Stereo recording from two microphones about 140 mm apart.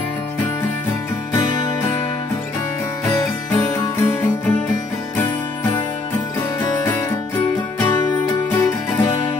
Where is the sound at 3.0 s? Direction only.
20° left (ahead or behind).